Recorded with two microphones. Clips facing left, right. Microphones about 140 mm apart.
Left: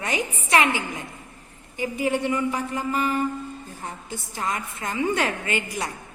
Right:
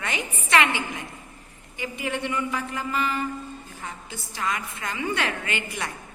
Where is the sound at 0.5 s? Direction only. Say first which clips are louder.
Left 1 dB; 15° left (ahead or behind).